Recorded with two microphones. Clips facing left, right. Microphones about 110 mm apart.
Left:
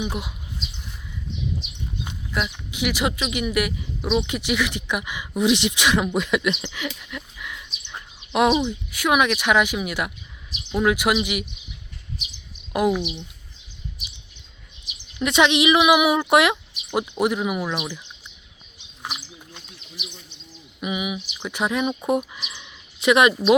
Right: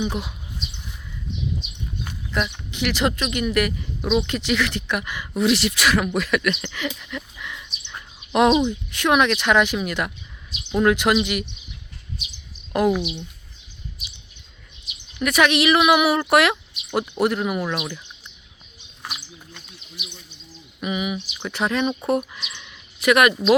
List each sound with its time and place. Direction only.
0.0 s speech: 10° left (ahead or behind)
2.3 s speech: 5° left (ahead or behind)
6.6 s a sound: 5° left (ahead or behind)
8.3 s speech: 5° left (ahead or behind)
12.7 s speech: 10° left (ahead or behind)
15.2 s speech: 20° left (ahead or behind)
20.8 s speech: 15° left (ahead or behind)